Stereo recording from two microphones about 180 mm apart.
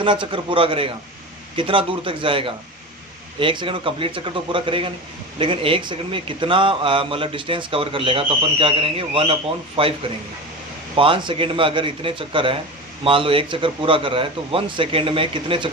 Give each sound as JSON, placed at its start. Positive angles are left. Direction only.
{"t": 0.0, "sound": "a man's voice", "side_deg": -25}
{"t": 10.9, "sound": "a man's voice", "side_deg": -30}